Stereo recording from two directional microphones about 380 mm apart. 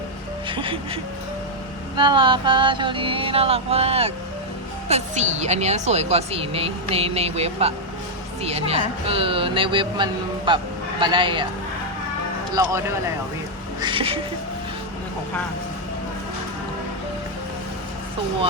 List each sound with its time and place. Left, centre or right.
0.4 s a woman's voice: centre
2.0 s a woman's voice: centre
13.8 s a woman's voice: centre